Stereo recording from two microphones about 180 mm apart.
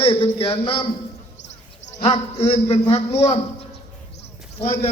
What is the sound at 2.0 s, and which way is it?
A man's voice, 35° left (ahead or behind).